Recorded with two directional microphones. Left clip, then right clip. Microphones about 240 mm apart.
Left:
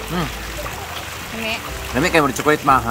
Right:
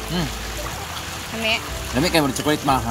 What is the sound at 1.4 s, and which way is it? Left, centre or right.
Speech, centre.